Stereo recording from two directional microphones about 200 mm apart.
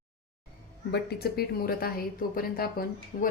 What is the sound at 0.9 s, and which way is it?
A woman's voice, 50° left (ahead or behind).